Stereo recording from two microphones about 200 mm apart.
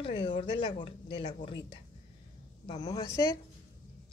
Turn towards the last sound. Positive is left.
turn(degrees=15)  # may be behind; listen again after turning